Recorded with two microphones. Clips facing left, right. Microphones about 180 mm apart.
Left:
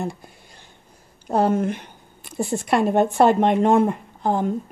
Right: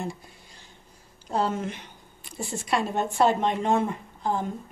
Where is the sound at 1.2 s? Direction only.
55° left (ahead or behind).